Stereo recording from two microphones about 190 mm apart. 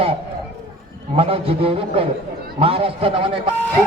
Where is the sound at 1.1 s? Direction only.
30° right (ahead or behind).